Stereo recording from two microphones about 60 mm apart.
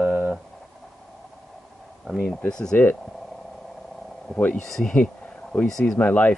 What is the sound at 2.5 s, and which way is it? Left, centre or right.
Speech, centre.